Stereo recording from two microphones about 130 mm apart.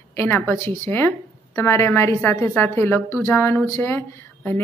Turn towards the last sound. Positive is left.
turn(degrees=15)  # may be behind; listen again after turning